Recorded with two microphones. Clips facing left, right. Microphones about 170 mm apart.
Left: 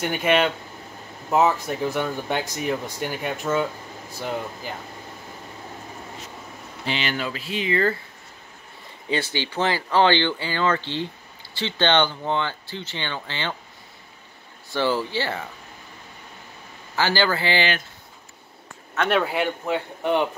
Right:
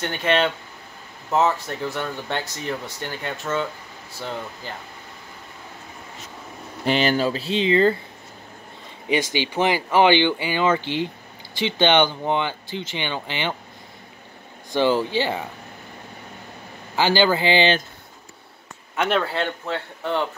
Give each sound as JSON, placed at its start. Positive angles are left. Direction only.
{"t": 0.0, "sound": "speech", "side_deg": 10}
{"t": 6.9, "sound": "speech", "side_deg": -40}
{"t": 9.1, "sound": "speech", "side_deg": -15}
{"t": 14.7, "sound": "speech", "side_deg": -15}
{"t": 16.9, "sound": "speech", "side_deg": -20}
{"t": 19.2, "sound": "speech", "side_deg": 10}